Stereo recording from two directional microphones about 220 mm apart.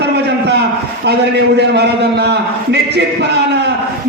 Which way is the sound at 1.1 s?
50° right (ahead or behind).